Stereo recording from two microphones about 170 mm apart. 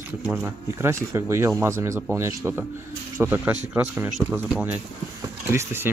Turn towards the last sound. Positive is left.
turn(degrees=-15)  # may be behind; listen again after turning